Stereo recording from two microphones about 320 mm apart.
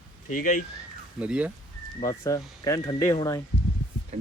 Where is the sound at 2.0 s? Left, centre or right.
Centre.